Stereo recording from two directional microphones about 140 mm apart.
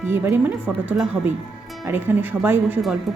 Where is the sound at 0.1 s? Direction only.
15° right (ahead or behind).